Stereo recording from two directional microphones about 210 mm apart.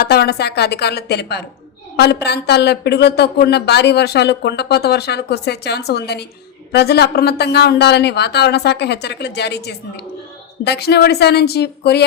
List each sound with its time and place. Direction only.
0.0 s a woman's voice: 50° left (ahead or behind)